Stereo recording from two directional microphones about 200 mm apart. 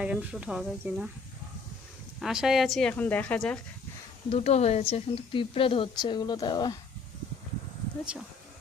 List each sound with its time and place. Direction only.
0.0 s a woman's voice: 5° right (ahead or behind)
2.1 s a woman's voice: centre (ahead or behind)
4.3 s speech: 30° left (ahead or behind)